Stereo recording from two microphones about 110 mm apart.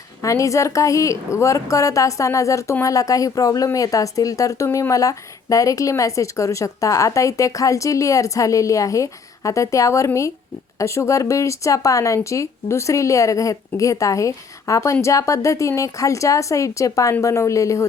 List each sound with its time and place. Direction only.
0.2 s speech: 30° left (ahead or behind)